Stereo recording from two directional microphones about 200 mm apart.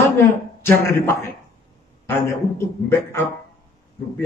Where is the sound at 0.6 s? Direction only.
10° left (ahead or behind).